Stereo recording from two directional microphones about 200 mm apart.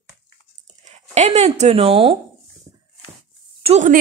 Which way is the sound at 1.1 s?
35° right (ahead or behind).